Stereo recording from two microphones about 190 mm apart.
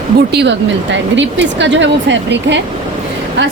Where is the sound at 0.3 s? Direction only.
70° right (ahead or behind).